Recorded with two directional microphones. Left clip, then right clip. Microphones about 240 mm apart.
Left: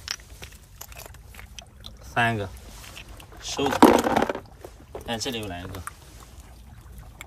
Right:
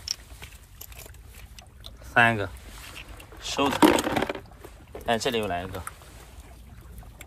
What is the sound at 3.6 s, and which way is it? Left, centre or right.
Speech, left.